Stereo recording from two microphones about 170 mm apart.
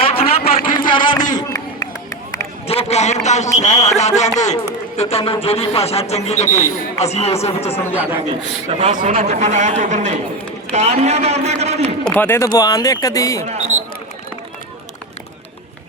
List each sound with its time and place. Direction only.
0.0 s a sound: 35° left (ahead or behind)
2.6 s a man's voice: 40° left (ahead or behind)
7.6 s speech: 15° left (ahead or behind)
8.7 s a man's voice: 40° right (ahead or behind)
12.0 s speech: 10° left (ahead or behind)
13.4 s a man's voice: 45° right (ahead or behind)